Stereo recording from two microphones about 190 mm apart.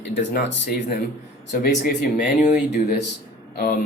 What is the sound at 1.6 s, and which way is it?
Speech, 45° left (ahead or behind).